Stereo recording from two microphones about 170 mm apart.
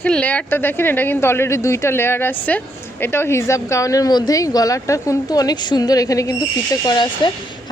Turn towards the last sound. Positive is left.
turn(degrees=25)  # may be behind; listen again after turning